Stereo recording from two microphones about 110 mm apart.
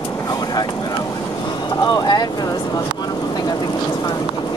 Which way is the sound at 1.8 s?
40° left (ahead or behind).